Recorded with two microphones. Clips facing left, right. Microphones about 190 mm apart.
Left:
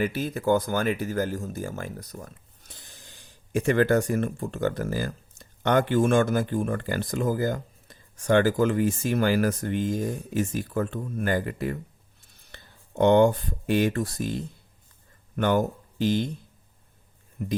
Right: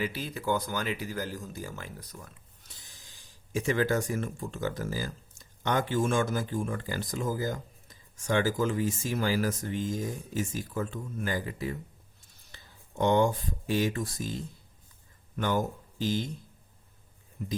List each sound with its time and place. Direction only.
0.0 s speech: 50° left (ahead or behind)
12.5 s a sound: 60° left (ahead or behind)
13.0 s speech: 65° left (ahead or behind)
17.4 s speech: 60° left (ahead or behind)